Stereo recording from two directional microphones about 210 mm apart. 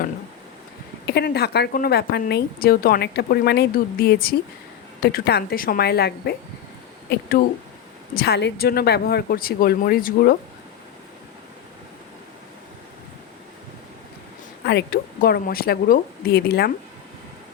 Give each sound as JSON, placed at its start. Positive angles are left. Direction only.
{"t": 1.0, "sound": "a woman's voice", "side_deg": 50}
{"t": 8.1, "sound": "a woman's voice", "side_deg": 50}
{"t": 14.6, "sound": "a woman's voice", "side_deg": 50}